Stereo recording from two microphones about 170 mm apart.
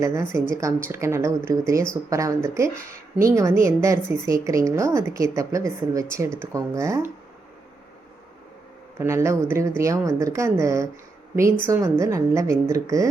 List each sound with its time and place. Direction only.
0.0 s a woman's voice: 15° right (ahead or behind)
9.0 s a woman's voice: 15° right (ahead or behind)